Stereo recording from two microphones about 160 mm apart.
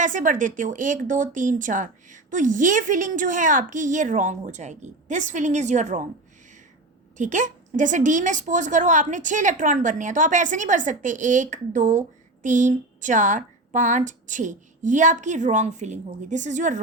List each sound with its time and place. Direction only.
0.0 s a woman's voice: 55° right (ahead or behind)
7.2 s a woman's voice: 50° right (ahead or behind)